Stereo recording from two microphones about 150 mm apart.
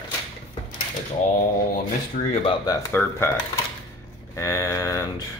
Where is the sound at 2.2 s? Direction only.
60° left (ahead or behind).